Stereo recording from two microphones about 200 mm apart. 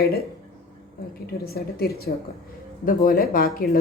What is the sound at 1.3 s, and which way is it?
Speech, 50° left (ahead or behind).